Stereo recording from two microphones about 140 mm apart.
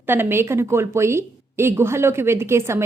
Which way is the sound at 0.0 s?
15° right (ahead or behind).